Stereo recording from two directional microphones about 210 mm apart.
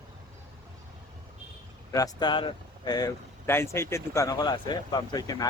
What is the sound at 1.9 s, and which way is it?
Speech, 15° left (ahead or behind).